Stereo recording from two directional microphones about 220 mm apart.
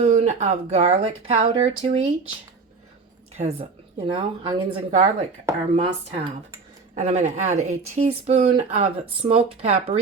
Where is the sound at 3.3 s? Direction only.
25° right (ahead or behind).